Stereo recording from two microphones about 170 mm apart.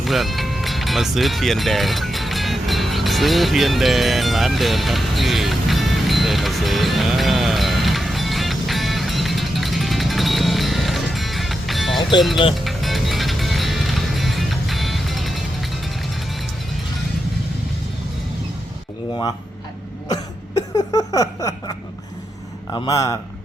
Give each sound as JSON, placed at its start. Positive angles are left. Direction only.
{"t": 0.0, "sound": "music", "side_deg": 0}
{"t": 20.1, "sound": "a sound", "side_deg": 20}
{"t": 22.7, "sound": "a man's voice", "side_deg": 20}